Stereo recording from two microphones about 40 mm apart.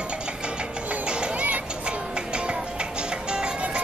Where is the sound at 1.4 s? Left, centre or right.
Right.